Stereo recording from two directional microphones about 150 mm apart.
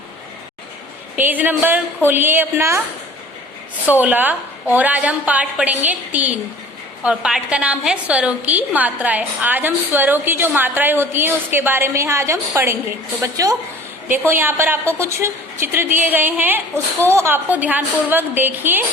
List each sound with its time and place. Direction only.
1.1 s a woman's voice: 10° right (ahead or behind)
3.8 s a woman's voice: 10° right (ahead or behind)